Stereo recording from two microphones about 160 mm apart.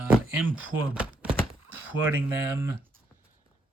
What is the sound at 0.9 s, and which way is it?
Thunk, 5° right (ahead or behind).